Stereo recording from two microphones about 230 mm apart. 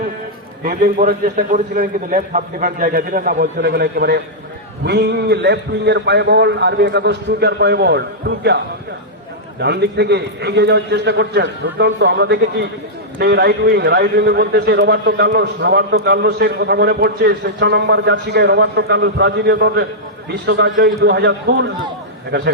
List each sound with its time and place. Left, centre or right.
0.6 s a man's voice: right
9.6 s a man's voice: right